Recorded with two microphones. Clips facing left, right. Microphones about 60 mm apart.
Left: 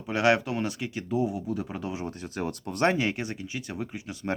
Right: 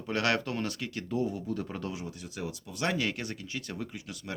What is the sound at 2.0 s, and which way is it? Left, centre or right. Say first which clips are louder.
Speech: left 6 dB; left.